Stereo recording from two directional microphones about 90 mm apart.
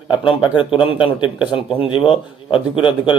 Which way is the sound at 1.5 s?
75° left (ahead or behind).